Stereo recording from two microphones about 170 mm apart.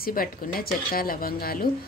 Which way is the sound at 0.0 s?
60° left (ahead or behind).